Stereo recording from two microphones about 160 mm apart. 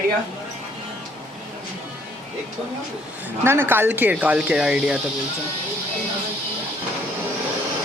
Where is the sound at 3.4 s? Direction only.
15° right (ahead or behind).